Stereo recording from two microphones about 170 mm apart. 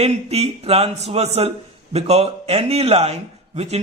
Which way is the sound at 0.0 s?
35° right (ahead or behind).